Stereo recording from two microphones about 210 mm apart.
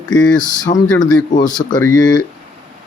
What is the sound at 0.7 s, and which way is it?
A man's voice, 30° left (ahead or behind).